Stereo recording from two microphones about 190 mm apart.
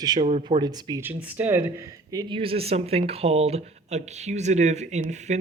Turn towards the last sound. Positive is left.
turn(degrees=-35)  # may be behind; listen again after turning